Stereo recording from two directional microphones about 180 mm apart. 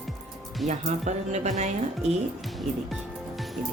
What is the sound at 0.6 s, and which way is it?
Speech, 40° right (ahead or behind).